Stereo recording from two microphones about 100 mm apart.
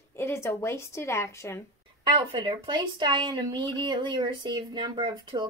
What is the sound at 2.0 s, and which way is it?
Speech, 55° right (ahead or behind).